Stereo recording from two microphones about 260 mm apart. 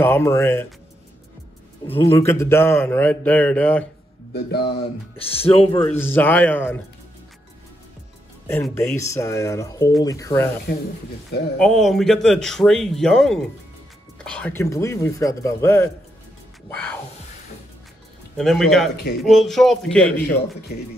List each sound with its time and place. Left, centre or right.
0.0 s a man's voice: centre
2.0 s a man's voice: centre
4.3 s a man's voice: left
5.1 s speech: left
5.9 s a man's voice: centre
8.5 s a man's voice: centre
11.5 s a man's voice: centre
18.4 s a man's voice: centre
20.2 s a man's voice: left